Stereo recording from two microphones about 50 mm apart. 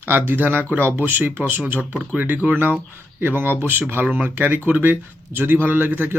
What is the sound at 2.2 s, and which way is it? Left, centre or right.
Speech, right.